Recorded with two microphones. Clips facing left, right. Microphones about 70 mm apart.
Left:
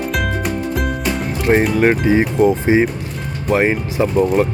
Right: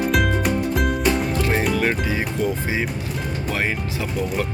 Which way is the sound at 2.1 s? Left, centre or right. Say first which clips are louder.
Left 10 dB; left.